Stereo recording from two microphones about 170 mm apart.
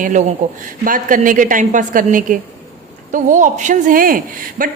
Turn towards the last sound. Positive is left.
turn(degrees=-55)  # may be behind; listen again after turning